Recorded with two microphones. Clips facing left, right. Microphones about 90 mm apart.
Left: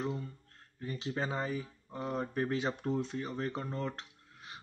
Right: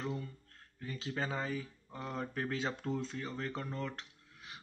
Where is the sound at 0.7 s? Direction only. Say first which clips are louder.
Left 3 dB; 20° left (ahead or behind).